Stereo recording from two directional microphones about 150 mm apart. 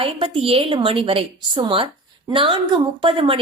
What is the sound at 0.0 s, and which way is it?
Speech, 40° right (ahead or behind).